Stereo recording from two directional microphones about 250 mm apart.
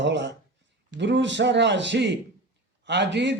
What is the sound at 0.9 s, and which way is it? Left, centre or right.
A man's voice, right.